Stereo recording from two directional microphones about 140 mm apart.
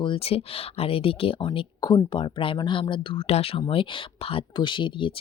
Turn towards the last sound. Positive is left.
turn(degrees=35)  # may be behind; listen again after turning